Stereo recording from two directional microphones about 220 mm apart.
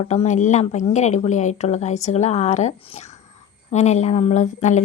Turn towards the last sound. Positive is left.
turn(degrees=35)  # may be behind; listen again after turning